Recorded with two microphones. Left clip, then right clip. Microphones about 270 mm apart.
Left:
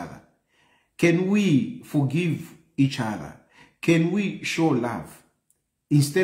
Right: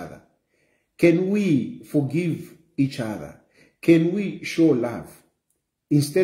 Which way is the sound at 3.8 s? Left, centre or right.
Centre.